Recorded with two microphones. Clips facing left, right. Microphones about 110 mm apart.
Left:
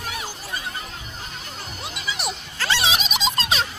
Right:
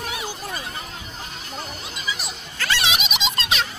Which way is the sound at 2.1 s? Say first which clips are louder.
Left 2 dB; 65° left (ahead or behind).